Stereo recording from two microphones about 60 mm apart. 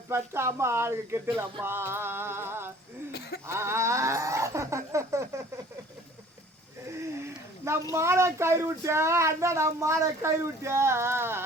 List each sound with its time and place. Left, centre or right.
0.1 s speech: right
1.4 s male singing: right
3.4 s a sound: right
7.6 s speech: right